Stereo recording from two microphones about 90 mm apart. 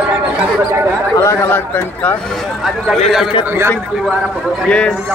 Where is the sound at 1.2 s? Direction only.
25° left (ahead or behind).